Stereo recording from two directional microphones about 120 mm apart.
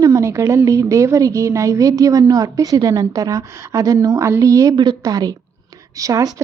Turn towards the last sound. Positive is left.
turn(degrees=-30)  # may be behind; listen again after turning